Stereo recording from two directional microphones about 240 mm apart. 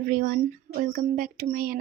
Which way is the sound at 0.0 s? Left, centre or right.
Right.